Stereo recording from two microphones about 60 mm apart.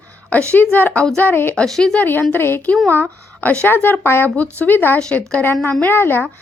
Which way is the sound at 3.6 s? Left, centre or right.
Left.